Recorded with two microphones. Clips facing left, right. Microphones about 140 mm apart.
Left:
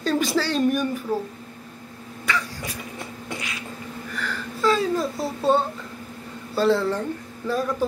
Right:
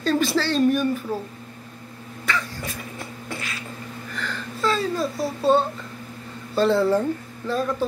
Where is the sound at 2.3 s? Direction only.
10° left (ahead or behind).